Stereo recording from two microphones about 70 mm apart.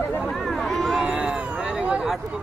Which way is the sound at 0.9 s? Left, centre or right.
Centre.